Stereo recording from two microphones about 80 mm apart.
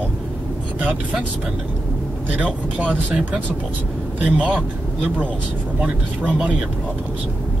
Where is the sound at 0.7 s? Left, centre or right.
Centre.